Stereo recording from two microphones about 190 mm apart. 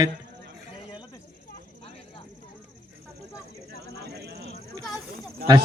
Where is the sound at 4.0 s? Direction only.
60° right (ahead or behind).